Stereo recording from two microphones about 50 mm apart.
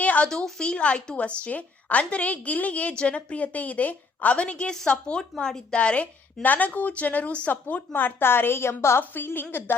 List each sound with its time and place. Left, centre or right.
0.0 s a sound: left
0.3 s speech: centre
4.7 s a woman's voice: centre
5.7 s speech: left
6.4 s speech: left
7.9 s a woman's voice: left
9.0 s a woman's voice: left